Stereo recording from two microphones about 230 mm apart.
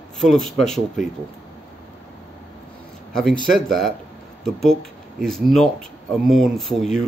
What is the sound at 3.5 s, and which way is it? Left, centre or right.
Speech, centre.